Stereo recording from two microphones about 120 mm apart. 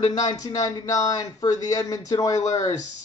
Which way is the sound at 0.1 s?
30° left (ahead or behind).